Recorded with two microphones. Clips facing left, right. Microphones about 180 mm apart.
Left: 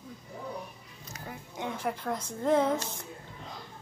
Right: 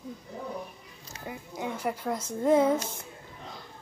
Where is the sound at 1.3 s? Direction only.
10° right (ahead or behind).